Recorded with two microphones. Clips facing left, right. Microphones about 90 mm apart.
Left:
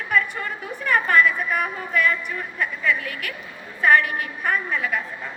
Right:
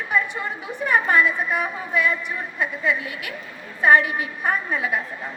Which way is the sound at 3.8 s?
30° right (ahead or behind).